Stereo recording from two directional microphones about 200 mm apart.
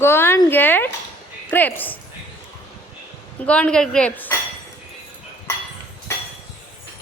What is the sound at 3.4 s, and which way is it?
Speech, 5° left (ahead or behind).